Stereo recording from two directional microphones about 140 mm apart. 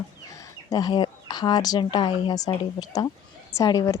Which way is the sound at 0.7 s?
30° left (ahead or behind).